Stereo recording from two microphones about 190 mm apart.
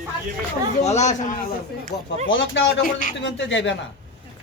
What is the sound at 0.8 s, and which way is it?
Speech, 35° left (ahead or behind).